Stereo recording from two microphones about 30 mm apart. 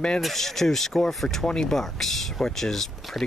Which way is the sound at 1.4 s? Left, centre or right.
Left.